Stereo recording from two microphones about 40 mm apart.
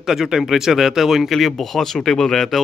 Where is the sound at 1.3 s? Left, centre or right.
Centre.